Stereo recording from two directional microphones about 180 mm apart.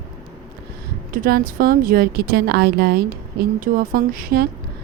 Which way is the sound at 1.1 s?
55° right (ahead or behind).